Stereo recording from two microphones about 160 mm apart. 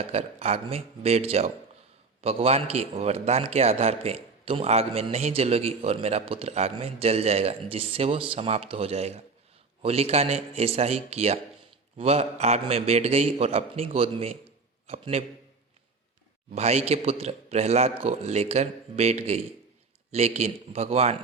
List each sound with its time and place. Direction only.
0.0 s a man's voice: 40° right (ahead or behind)
16.6 s a man's voice: 40° right (ahead or behind)